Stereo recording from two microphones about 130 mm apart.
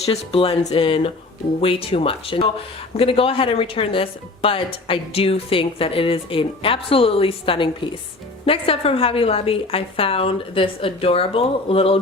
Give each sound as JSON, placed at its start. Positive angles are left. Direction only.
{"t": 0.0, "sound": "a woman's voice", "side_deg": 50}